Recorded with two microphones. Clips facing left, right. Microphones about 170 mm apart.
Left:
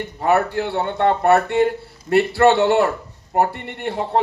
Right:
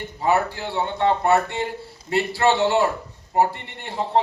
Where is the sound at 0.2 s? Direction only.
60° left (ahead or behind).